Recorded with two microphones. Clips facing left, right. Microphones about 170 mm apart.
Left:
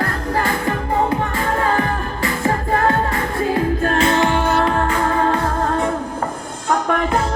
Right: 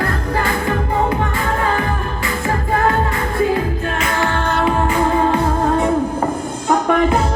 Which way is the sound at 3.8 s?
35° left (ahead or behind).